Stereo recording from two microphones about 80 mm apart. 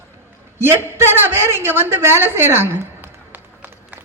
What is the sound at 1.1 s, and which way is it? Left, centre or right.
A woman's voice, right.